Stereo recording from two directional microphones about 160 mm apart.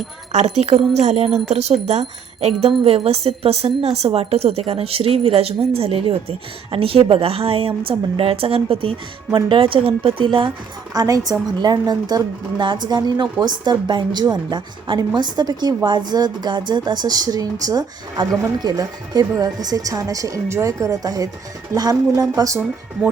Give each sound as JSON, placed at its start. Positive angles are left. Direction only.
{"t": 0.3, "sound": "a woman's voice", "side_deg": -40}